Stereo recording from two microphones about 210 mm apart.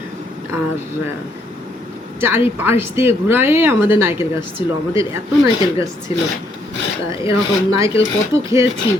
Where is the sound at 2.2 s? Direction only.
10° right (ahead or behind).